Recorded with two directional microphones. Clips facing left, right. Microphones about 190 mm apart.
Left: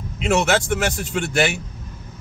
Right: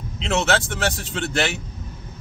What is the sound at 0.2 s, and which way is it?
Speech, 15° left (ahead or behind).